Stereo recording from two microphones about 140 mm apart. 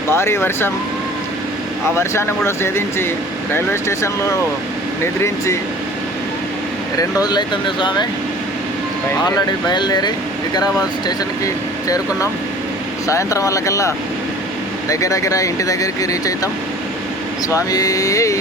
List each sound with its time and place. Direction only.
0.1 s speech: 20° left (ahead or behind)
2.0 s speech: 20° left (ahead or behind)
7.0 s speech: 30° left (ahead or behind)
9.2 s speech: 30° left (ahead or behind)
11.4 s speech: 25° left (ahead or behind)
17.5 s speech: 25° left (ahead or behind)